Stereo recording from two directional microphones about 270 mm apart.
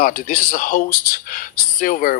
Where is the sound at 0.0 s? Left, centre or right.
Left.